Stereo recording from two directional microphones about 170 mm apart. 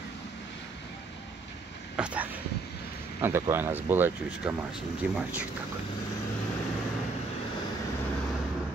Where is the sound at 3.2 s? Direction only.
15° right (ahead or behind).